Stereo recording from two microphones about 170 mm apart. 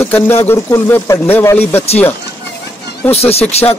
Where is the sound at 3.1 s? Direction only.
35° left (ahead or behind).